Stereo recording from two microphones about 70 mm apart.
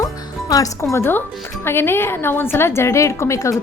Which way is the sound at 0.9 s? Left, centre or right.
Left.